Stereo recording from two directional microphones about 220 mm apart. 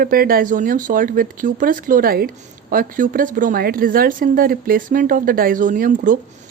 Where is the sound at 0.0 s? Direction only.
40° right (ahead or behind).